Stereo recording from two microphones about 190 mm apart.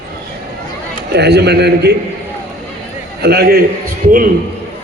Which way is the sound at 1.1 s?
60° right (ahead or behind).